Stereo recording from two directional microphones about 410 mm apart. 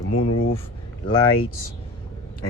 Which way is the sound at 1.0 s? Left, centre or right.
Centre.